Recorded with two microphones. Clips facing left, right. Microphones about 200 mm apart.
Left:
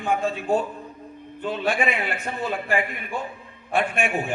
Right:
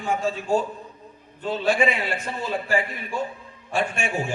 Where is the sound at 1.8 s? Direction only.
60° left (ahead or behind).